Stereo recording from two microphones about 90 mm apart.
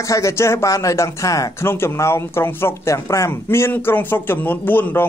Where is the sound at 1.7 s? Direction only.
30° left (ahead or behind).